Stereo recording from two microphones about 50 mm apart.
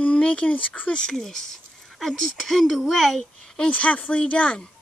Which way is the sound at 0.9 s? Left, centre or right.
Centre.